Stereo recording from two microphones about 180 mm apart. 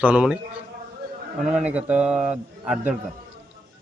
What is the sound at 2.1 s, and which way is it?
Speech, 40° right (ahead or behind).